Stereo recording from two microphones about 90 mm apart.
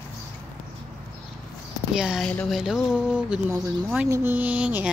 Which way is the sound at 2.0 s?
5° right (ahead or behind).